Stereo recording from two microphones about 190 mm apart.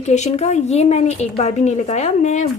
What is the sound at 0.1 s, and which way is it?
Speech, 35° left (ahead or behind).